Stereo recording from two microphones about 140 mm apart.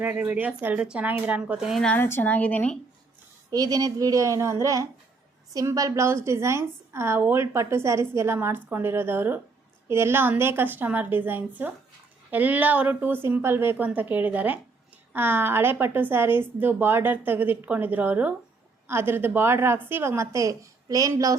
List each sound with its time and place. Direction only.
0.0 s a woman's voice: 10° right (ahead or behind)
1.8 s a woman's voice: 10° left (ahead or behind)
3.5 s a woman's voice: 25° right (ahead or behind)